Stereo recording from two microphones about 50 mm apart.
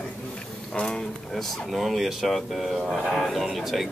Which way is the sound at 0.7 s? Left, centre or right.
Centre.